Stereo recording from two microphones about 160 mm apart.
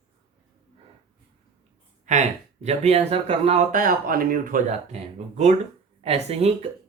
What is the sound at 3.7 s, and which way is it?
Speech, 60° right (ahead or behind).